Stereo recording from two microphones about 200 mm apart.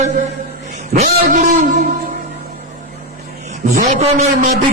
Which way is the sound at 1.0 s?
40° right (ahead or behind).